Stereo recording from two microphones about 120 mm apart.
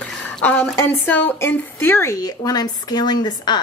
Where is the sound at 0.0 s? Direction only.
15° left (ahead or behind).